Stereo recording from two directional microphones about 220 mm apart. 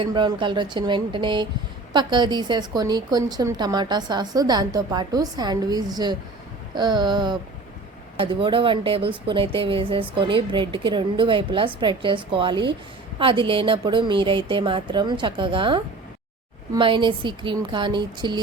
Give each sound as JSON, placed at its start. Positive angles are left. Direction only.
{"t": 0.0, "sound": "speech", "side_deg": -20}